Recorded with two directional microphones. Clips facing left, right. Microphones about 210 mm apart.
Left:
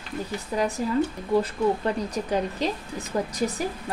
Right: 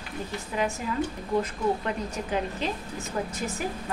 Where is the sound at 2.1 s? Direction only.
35° left (ahead or behind).